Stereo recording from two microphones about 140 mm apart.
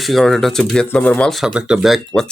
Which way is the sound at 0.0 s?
Centre (ahead or behind).